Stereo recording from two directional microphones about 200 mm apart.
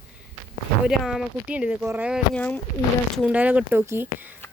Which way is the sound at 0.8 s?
5° right (ahead or behind).